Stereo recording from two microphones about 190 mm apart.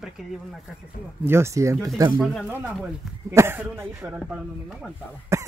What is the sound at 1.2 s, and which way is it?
Speech, 15° right (ahead or behind).